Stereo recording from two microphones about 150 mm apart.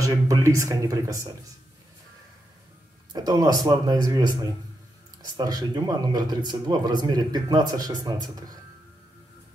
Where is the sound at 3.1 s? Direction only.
25° right (ahead or behind).